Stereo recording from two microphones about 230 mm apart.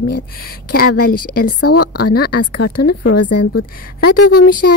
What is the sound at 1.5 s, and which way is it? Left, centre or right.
A woman's voice, left.